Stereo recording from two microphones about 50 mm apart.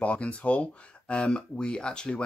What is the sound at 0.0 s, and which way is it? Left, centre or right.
Speech, left.